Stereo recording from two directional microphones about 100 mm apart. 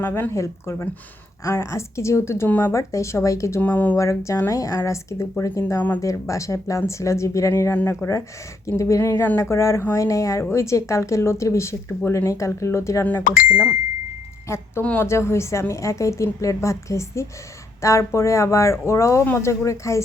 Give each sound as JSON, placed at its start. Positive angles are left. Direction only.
{"t": 0.0, "sound": "speech", "side_deg": 25}
{"t": 2.7, "sound": "speech", "side_deg": 30}
{"t": 3.6, "sound": "speech", "side_deg": 15}
{"t": 3.9, "sound": "speech", "side_deg": 30}
{"t": 14.4, "sound": "speech", "side_deg": 30}